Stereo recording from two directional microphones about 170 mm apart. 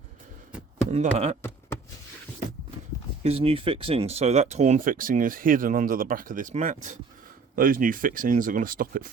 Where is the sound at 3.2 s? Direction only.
35° right (ahead or behind).